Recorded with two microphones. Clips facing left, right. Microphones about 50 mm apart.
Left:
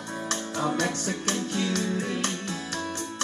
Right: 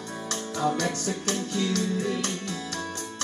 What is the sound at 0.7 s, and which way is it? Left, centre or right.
Music, left.